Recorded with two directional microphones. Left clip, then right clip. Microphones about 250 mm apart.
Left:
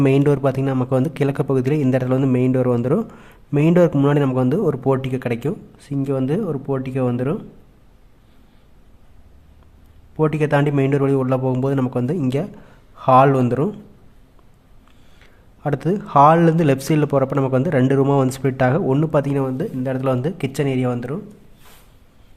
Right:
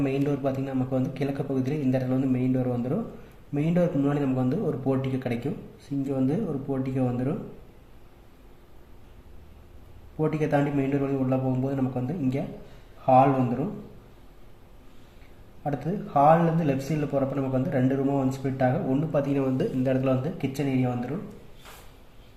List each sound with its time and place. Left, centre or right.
0.0 s a man's voice: left
10.2 s a man's voice: left
15.6 s a man's voice: left